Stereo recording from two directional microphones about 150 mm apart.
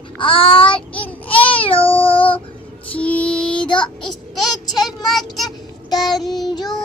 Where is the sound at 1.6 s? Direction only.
35° left (ahead or behind).